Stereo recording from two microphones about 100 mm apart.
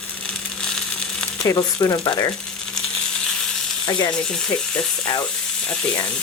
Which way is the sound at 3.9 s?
45° left (ahead or behind).